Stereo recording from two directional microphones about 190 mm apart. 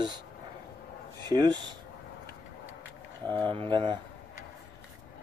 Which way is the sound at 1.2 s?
20° right (ahead or behind).